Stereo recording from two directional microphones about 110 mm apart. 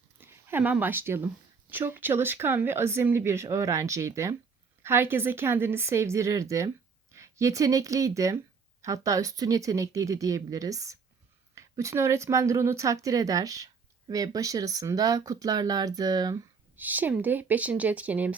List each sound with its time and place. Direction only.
0.2 s a woman's voice: 20° right (ahead or behind); by 16.4 s 35° right (ahead or behind)
16.7 s speech: 15° right (ahead or behind)